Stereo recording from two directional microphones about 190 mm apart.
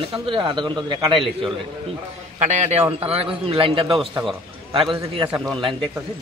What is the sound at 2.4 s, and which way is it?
A man's voice, 35° right (ahead or behind).